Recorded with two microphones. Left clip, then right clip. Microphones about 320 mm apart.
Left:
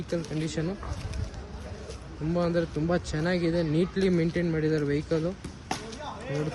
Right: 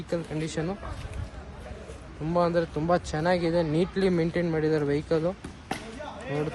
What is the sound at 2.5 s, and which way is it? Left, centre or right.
Speech, centre.